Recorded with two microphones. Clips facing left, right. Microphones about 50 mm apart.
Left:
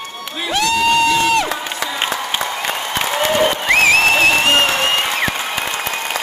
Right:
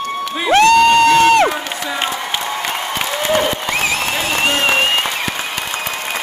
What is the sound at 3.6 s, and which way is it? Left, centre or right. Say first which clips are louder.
Applause: left 6 dB; left.